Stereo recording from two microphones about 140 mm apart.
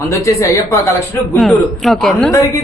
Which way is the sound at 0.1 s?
20° left (ahead or behind).